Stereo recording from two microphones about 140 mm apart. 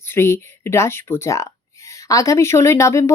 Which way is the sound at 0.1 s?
15° left (ahead or behind).